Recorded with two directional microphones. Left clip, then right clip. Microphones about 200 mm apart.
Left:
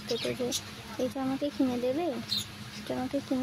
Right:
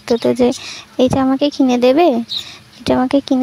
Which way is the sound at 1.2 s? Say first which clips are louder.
Right 16 dB; 50° right (ahead or behind).